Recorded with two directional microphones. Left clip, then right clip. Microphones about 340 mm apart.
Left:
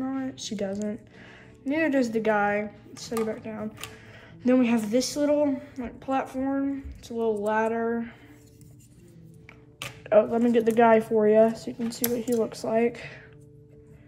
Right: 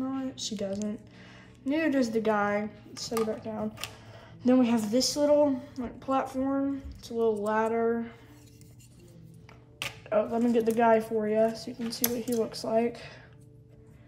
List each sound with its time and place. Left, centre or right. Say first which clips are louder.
0.0 s a sound: left 2 dB; centre
1.8 s a woman's voice: left 3 dB; centre
9.8 s a woman's voice: left 7 dB; centre